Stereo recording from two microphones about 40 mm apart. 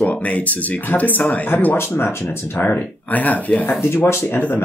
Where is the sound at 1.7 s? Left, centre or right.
Left.